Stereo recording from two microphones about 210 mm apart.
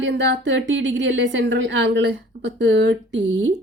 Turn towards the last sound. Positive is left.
turn(degrees=-55)  # may be behind; listen again after turning